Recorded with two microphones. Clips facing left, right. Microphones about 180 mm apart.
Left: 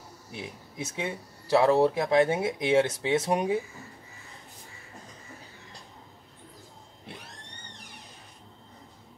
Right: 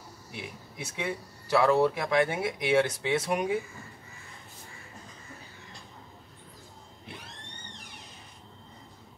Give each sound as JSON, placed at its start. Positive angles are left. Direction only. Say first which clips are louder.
{"t": 0.9, "sound": "speech", "louder": "right 1 dB", "side_deg": 25}